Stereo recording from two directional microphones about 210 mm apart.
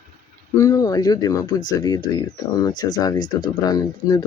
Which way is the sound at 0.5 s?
15° left (ahead or behind).